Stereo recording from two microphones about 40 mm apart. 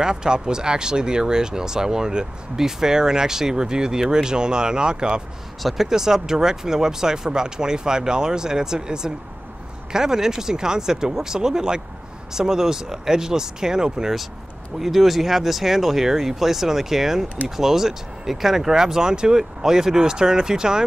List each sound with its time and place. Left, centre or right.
0.0 s speech: centre
5.6 s speech: centre
5.9 s speech: centre
14.8 s speech: centre